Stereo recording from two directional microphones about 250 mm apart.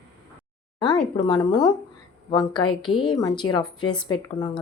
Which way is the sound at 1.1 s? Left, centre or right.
Centre.